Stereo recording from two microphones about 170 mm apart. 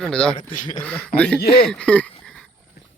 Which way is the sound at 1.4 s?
70° left (ahead or behind).